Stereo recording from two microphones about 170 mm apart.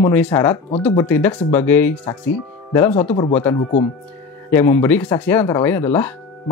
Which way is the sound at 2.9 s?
35° left (ahead or behind).